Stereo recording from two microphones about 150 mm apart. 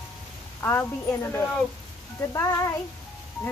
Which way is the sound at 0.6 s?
15° left (ahead or behind).